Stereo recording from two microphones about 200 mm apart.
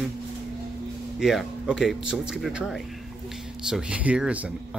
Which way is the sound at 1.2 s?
Centre (ahead or behind).